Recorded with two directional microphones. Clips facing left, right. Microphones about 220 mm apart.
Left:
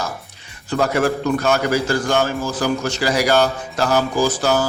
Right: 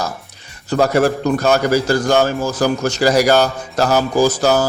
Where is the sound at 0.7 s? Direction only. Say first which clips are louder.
Right 4 dB; 40° right (ahead or behind).